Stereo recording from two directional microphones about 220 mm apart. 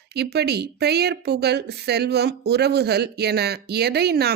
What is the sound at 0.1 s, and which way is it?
Speech, 50° right (ahead or behind).